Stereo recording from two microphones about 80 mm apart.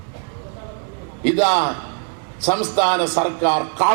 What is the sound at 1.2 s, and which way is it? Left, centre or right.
A man's voice, centre.